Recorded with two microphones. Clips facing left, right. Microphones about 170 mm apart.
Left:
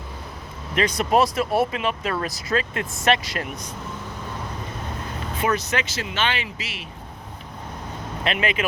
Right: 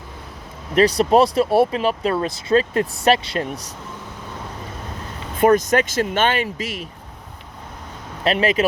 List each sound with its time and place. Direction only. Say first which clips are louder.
0.8 s speech: right 5 dB; 35° right (ahead or behind)
5.4 s speech: right 9 dB; 50° right (ahead or behind)
8.2 s speech: right 6 dB; 35° right (ahead or behind)